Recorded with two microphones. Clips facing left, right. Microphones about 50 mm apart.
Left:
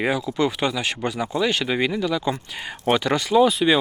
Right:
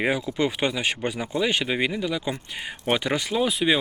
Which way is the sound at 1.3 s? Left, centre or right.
Centre.